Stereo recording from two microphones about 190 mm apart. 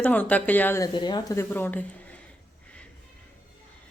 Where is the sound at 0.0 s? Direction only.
10° left (ahead or behind).